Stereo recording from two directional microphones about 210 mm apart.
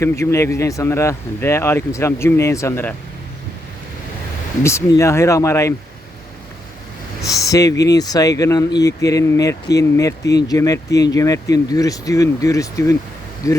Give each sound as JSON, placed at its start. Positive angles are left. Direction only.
{"t": 0.0, "sound": "speech", "side_deg": 15}
{"t": 4.6, "sound": "speech", "side_deg": 15}
{"t": 7.2, "sound": "speech", "side_deg": 15}